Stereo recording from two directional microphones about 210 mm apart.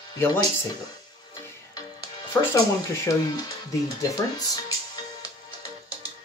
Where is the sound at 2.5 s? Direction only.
15° left (ahead or behind).